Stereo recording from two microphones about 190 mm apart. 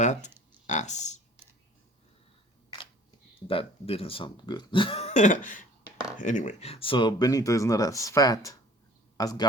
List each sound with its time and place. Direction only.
0.0 s speech: 40° left (ahead or behind)
3.4 s speech: 30° left (ahead or behind)